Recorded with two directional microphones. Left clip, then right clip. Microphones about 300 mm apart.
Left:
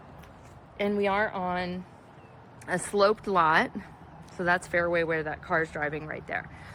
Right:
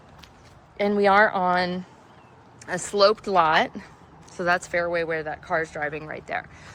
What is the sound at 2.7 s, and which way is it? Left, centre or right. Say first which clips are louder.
Speech: right 4 dB; centre.